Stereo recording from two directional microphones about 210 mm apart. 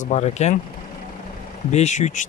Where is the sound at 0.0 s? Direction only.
35° left (ahead or behind).